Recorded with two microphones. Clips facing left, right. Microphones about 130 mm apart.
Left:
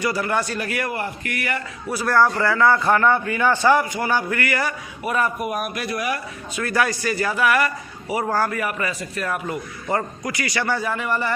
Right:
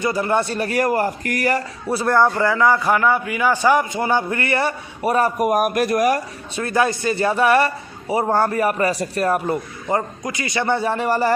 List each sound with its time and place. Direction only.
0.0 s a man's voice: 25° right (ahead or behind); by 6.2 s 40° right (ahead or behind)
6.6 s a man's voice: 25° right (ahead or behind)
9.9 s a man's voice: 20° right (ahead or behind); by 11.3 s 40° right (ahead or behind)